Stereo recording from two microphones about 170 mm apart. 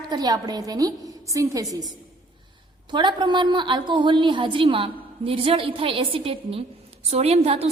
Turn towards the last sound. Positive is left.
turn(degrees=-35)  # may be behind; listen again after turning